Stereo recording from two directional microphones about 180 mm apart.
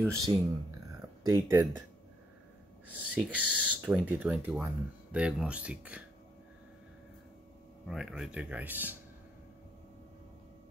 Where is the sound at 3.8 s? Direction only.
10° right (ahead or behind).